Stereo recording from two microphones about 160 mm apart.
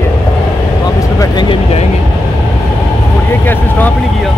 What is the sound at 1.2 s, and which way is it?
Speech, 30° left (ahead or behind).